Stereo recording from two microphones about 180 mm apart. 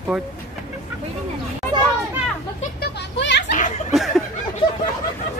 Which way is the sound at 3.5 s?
45° left (ahead or behind).